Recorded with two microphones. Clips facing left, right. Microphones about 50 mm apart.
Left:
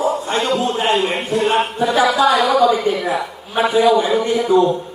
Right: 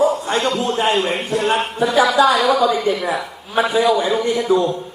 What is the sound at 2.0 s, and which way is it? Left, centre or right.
Speech, centre.